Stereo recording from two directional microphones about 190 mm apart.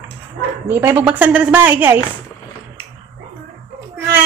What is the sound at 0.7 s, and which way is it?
A woman's voice, 10° right (ahead or behind).